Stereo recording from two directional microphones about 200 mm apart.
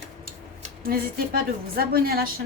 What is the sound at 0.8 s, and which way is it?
A woman's voice, 45° right (ahead or behind).